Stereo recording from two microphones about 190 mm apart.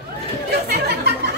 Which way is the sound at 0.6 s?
60° right (ahead or behind).